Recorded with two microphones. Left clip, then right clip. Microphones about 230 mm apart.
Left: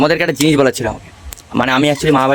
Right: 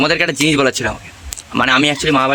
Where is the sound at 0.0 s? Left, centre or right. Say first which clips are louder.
Left 1 dB; centre.